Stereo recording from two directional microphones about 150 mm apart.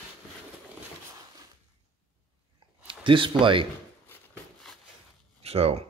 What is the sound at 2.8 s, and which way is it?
Speech, 35° right (ahead or behind).